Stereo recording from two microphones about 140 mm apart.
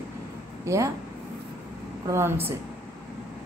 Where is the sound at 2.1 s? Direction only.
15° right (ahead or behind).